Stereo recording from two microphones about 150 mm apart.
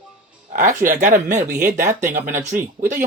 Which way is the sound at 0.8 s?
60° right (ahead or behind).